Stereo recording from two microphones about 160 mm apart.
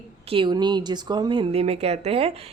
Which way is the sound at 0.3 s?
30° right (ahead or behind).